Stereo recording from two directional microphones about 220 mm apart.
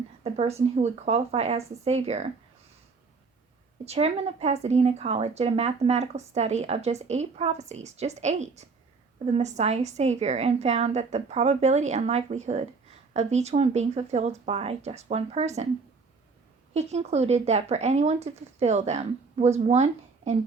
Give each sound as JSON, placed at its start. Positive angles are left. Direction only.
{"t": 0.3, "sound": "a woman's voice", "side_deg": -30}
{"t": 3.8, "sound": "a woman's voice", "side_deg": -30}
{"t": 16.7, "sound": "speech", "side_deg": -30}